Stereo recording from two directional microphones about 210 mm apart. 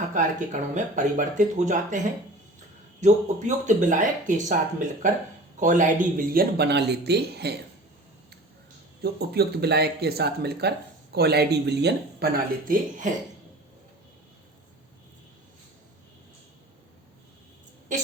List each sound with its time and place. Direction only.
0.1 s speech: 35° right (ahead or behind)
3.0 s speech: 35° right (ahead or behind); by 7.5 s 50° right (ahead or behind)
9.0 s speech: 50° right (ahead or behind)